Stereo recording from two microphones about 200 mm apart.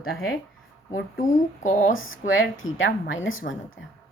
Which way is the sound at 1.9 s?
80° left.